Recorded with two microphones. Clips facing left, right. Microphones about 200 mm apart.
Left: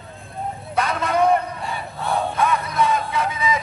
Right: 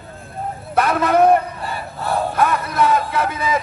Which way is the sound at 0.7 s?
60° right (ahead or behind).